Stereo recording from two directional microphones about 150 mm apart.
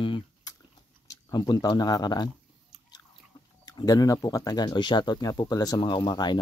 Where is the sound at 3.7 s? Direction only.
25° left (ahead or behind).